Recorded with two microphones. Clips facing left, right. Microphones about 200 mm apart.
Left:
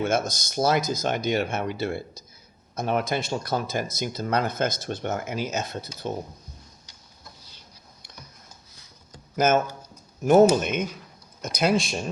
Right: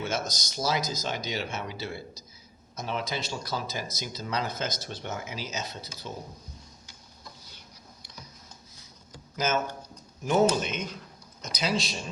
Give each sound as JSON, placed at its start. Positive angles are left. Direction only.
{"t": 0.0, "sound": "speech", "side_deg": 55}
{"t": 9.3, "sound": "speech", "side_deg": 55}